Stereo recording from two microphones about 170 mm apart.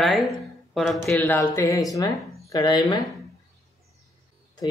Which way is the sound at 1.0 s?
10° left (ahead or behind).